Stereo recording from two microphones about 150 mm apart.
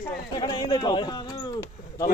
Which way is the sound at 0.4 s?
30° left (ahead or behind).